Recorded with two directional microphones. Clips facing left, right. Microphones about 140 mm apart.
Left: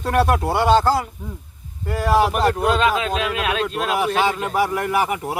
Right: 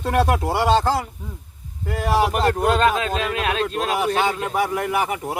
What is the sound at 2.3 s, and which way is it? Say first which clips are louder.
A man's voice: even; 45° right (ahead or behind).